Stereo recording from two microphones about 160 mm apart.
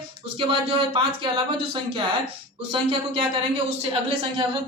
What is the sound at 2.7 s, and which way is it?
Speech, 35° right (ahead or behind).